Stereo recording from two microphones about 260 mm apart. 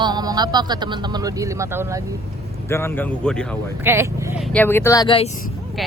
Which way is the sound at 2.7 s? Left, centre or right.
Centre.